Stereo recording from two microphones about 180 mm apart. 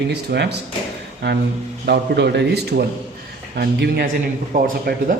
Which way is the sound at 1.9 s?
65° right (ahead or behind).